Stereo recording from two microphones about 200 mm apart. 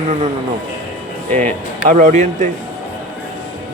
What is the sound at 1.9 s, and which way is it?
Speech, 40° right (ahead or behind).